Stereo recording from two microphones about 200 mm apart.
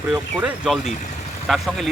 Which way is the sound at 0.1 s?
5° right (ahead or behind).